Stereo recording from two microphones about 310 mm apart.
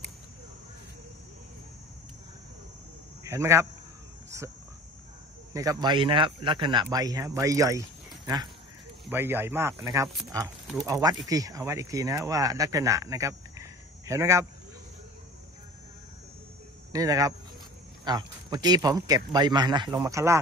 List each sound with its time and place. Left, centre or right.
3.3 s speech: centre
5.5 s speech: centre
9.0 s speech: centre
16.9 s speech: centre